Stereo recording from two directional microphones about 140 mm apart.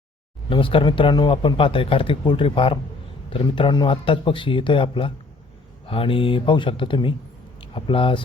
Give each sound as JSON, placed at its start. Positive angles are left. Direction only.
{"t": 0.5, "sound": "speech", "side_deg": 40}